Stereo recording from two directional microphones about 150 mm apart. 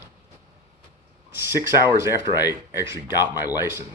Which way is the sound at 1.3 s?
15° right (ahead or behind).